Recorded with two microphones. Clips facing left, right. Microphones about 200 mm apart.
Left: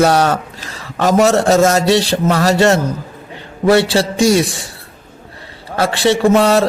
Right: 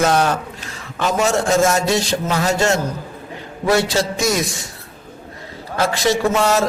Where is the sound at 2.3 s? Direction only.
70° left (ahead or behind).